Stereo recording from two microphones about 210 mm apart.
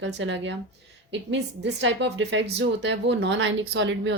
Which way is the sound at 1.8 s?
60° right (ahead or behind).